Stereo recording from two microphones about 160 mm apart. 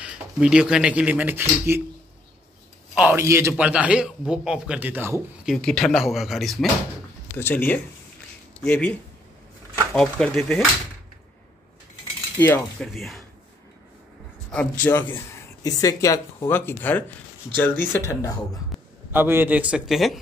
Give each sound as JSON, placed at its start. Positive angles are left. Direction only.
{"t": 0.0, "sound": "a man's voice", "side_deg": -5}
{"t": 2.9, "sound": "a man's voice", "side_deg": -10}
{"t": 5.4, "sound": "speech", "side_deg": 0}
{"t": 7.3, "sound": "speech", "side_deg": 15}
{"t": 9.9, "sound": "speech", "side_deg": 5}
{"t": 12.4, "sound": "speech", "side_deg": 10}
{"t": 14.5, "sound": "speech", "side_deg": 10}
{"t": 19.1, "sound": "a man's voice", "side_deg": -15}